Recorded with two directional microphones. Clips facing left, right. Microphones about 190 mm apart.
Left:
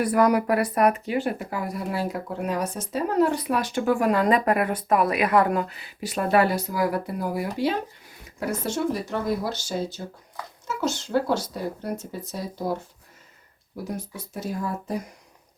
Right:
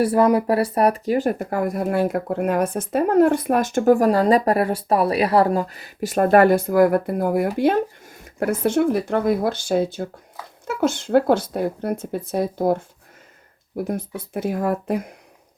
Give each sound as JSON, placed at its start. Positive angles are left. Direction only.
{"t": 0.0, "sound": "speech", "side_deg": -25}